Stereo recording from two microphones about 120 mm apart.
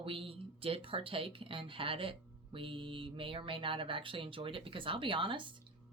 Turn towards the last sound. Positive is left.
turn(degrees=-45)  # may be behind; listen again after turning